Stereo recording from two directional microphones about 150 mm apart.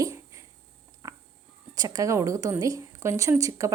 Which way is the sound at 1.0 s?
20° right (ahead or behind).